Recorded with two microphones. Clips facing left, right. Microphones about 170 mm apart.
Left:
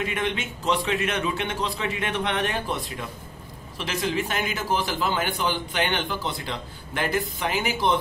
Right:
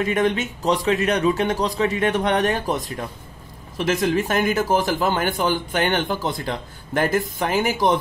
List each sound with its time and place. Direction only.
0.0 s a man's voice: 40° right (ahead or behind)